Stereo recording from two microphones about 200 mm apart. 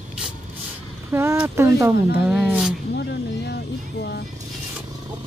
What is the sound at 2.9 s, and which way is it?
Speech, 55° left (ahead or behind).